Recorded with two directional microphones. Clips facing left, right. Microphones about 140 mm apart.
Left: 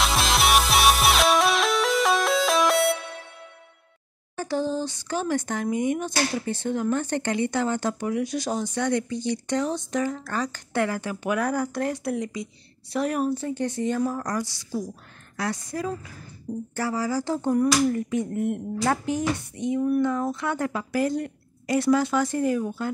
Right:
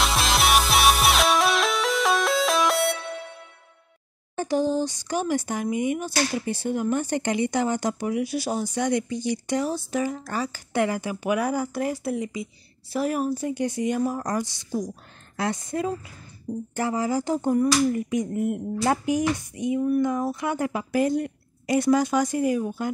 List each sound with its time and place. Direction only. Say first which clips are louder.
0.0 s music: even; centre (ahead or behind)
4.4 s a woman's voice: right 3 dB; 15° right (ahead or behind)